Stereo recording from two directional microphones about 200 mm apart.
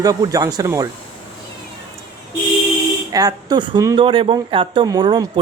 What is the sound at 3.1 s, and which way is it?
Speech, 20° right (ahead or behind).